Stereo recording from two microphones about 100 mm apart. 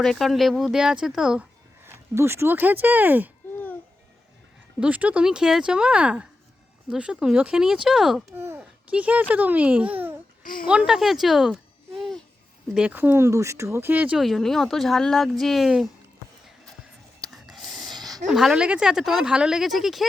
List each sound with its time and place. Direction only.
0.0 s speech: centre (ahead or behind)
1.8 s speech: 25° right (ahead or behind)
4.8 s speech: 15° right (ahead or behind)
8.3 s a child's voice: 25° right (ahead or behind); by 12.2 s centre (ahead or behind)
12.7 s speech: 15° right (ahead or behind)
14.2 s speech: centre (ahead or behind)
17.2 s snort: 5° right (ahead or behind)
18.3 s speech: 5° right (ahead or behind)